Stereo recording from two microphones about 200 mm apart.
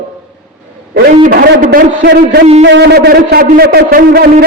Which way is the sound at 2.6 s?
65° right (ahead or behind).